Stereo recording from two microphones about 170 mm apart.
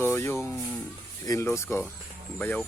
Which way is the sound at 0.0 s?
15° left (ahead or behind).